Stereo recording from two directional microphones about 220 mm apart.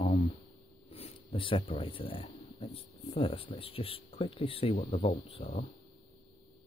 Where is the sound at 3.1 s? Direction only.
25° left (ahead or behind).